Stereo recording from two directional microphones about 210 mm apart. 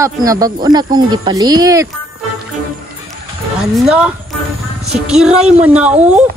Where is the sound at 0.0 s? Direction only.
15° right (ahead or behind).